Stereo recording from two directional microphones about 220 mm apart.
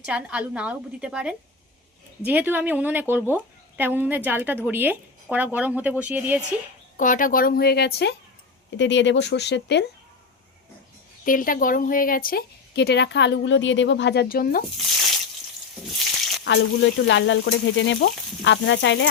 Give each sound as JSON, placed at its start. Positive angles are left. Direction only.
{"t": 0.0, "sound": "a woman's voice", "side_deg": -5}
{"t": 6.9, "sound": "speech", "side_deg": 35}
{"t": 11.3, "sound": "speech", "side_deg": 40}
{"t": 16.4, "sound": "frying", "side_deg": 55}